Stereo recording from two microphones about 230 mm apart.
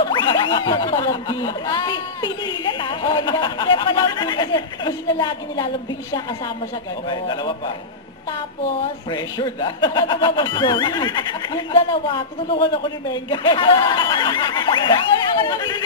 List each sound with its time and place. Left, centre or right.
0.0 s speech: left
7.1 s speech: left
9.1 s speech: centre